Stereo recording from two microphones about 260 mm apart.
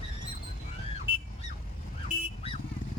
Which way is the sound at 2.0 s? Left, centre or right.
Left.